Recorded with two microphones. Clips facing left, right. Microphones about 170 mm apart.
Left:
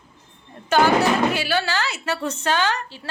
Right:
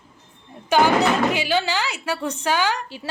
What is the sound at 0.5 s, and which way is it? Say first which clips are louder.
Speech: even; 15° right (ahead or behind).